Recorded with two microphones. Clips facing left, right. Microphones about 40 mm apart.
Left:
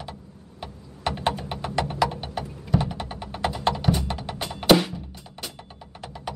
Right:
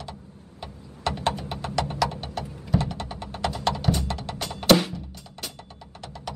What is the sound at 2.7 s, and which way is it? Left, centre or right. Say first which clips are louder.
Music: left 1 dB; centre.